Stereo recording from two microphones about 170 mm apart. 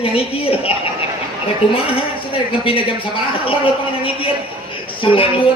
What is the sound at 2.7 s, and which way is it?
A man's voice, 30° left (ahead or behind).